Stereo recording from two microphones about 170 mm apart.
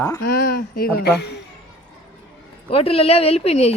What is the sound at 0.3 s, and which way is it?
Speech, 65° left (ahead or behind).